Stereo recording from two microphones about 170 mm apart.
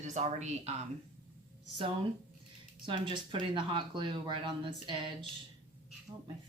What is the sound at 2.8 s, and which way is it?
Speech, 30° right (ahead or behind).